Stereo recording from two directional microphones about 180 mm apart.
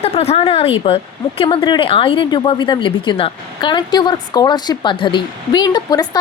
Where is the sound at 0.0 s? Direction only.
35° left (ahead or behind).